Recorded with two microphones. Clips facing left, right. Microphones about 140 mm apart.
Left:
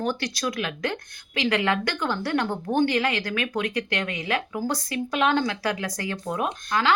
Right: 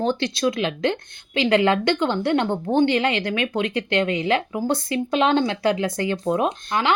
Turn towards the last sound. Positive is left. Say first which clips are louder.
# right 2 dB
turn(degrees=-25)  # may be behind; listen again after turning